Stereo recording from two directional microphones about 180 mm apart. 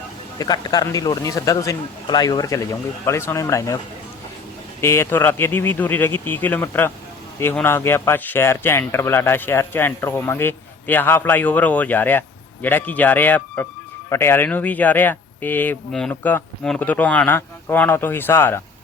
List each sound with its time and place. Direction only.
0.3 s speech: 20° left (ahead or behind)
4.8 s speech: 15° left (ahead or behind)